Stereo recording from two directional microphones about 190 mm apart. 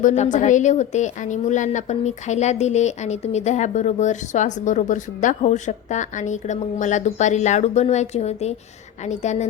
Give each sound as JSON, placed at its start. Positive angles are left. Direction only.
{"t": 0.0, "sound": "a woman's voice", "side_deg": 40}